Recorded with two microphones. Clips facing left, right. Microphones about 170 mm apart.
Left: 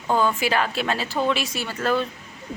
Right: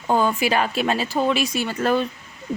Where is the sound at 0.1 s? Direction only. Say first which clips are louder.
Right 2 dB; 15° right (ahead or behind).